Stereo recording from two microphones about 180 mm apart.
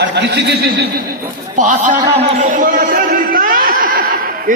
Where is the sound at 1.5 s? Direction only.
45° right (ahead or behind).